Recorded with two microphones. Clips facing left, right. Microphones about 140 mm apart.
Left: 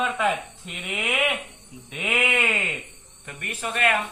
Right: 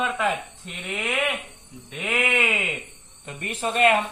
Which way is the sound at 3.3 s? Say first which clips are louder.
Right 4 dB; 25° right (ahead or behind).